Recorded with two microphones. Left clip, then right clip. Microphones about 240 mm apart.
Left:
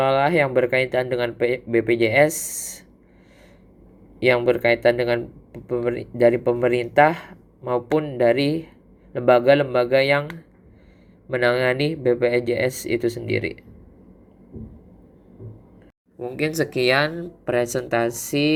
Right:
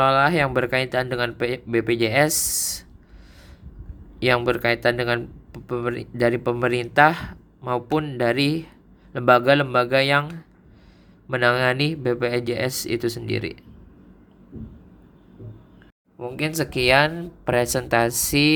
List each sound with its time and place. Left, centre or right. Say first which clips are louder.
0.0 s speech: even; centre
4.2 s speech: left 2 dB; right
11.3 s speech: even; right
16.1 s speech: left 2 dB; centre